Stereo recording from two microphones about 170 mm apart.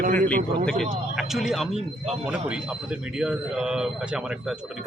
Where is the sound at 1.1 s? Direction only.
Centre (ahead or behind).